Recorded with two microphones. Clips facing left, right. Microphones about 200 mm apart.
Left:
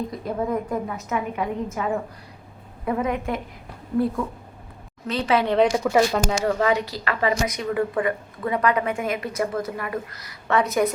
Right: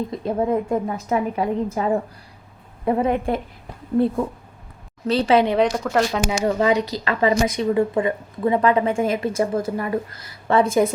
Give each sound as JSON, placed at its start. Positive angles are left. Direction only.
{"t": 0.1, "sound": "a woman's voice", "side_deg": -25}
{"t": 5.5, "sound": "speech", "side_deg": 5}
{"t": 6.4, "sound": "a woman's voice", "side_deg": -20}